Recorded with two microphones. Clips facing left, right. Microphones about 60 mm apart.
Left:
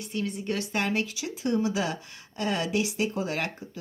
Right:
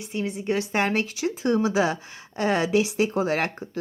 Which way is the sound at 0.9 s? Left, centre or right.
Right.